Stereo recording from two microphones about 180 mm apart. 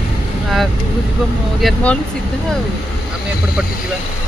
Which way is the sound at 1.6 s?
5° left (ahead or behind).